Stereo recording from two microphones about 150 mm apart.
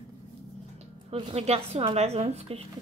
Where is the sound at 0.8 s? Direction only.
45° right (ahead or behind).